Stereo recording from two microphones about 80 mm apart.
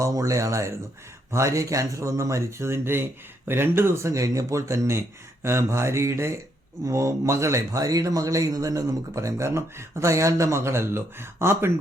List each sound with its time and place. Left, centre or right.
0.0 s speech: right